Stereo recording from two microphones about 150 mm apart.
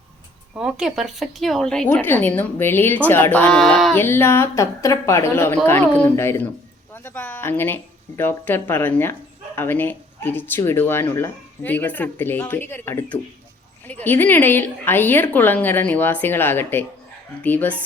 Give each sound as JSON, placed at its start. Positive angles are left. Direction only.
{"t": 0.5, "sound": "speech", "side_deg": -5}
{"t": 3.6, "sound": "a sound", "side_deg": 0}
{"t": 3.9, "sound": "speech", "side_deg": 15}